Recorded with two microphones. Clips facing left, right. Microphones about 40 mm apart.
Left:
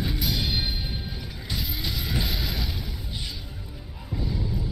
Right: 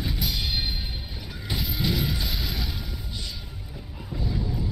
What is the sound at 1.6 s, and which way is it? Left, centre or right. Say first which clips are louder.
Mechanisms: right 6 dB; centre.